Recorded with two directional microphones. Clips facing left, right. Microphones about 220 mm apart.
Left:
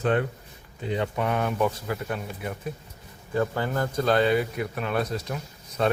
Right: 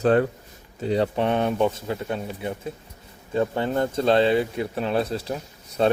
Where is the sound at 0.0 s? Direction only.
40° right (ahead or behind).